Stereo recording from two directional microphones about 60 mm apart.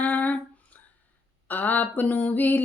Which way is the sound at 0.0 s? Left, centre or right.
Left.